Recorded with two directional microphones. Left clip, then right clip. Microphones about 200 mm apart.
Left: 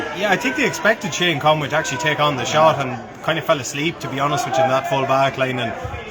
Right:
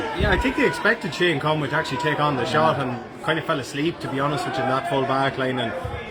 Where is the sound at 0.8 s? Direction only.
30° left (ahead or behind).